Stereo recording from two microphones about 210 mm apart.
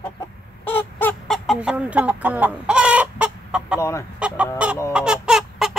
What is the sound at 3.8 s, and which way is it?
Speech, 15° left (ahead or behind).